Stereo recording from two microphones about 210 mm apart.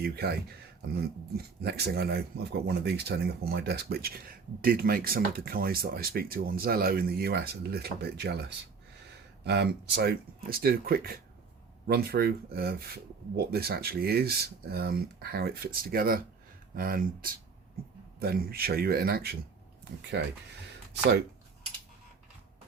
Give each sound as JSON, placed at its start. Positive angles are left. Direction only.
{"t": 0.0, "sound": "speech", "side_deg": -50}
{"t": 1.4, "sound": "speech", "side_deg": -50}